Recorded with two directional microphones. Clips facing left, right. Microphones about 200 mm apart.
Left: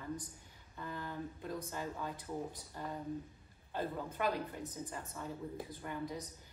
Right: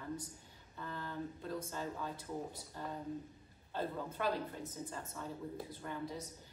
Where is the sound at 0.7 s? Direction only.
15° left (ahead or behind).